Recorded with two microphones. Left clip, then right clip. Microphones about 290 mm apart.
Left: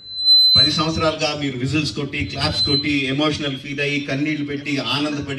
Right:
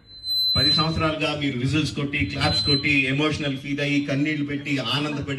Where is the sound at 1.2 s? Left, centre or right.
Left.